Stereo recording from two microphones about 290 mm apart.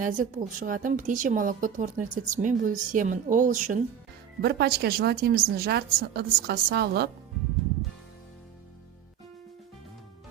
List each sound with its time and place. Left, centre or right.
0.0 s a woman's voice: right